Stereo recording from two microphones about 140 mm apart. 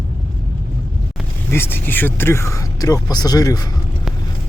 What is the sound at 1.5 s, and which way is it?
Speech, 15° left (ahead or behind).